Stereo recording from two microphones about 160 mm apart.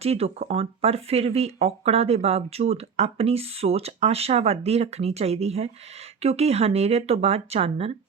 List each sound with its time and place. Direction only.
0.0 s speech: 40° right (ahead or behind)